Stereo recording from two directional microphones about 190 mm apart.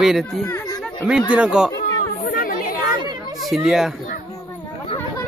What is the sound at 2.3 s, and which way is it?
Chatter, 45° left (ahead or behind).